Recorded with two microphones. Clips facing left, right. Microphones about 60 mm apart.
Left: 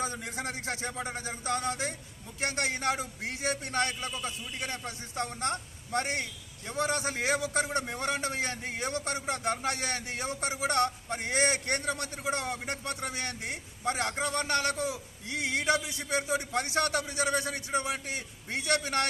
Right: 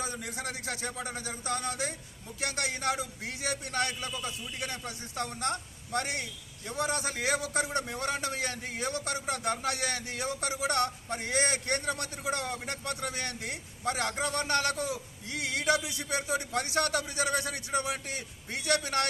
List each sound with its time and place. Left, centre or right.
0.0 s a man's voice: left